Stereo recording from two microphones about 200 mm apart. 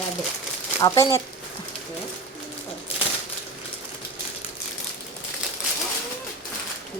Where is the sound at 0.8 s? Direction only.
20° left (ahead or behind).